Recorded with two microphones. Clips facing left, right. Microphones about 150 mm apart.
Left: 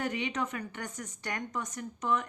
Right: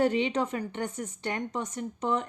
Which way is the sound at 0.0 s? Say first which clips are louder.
Right 7 dB; 30° right (ahead or behind).